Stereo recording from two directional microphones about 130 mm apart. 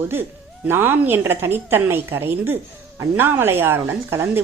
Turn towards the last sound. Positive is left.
turn(degrees=-20)  # may be behind; listen again after turning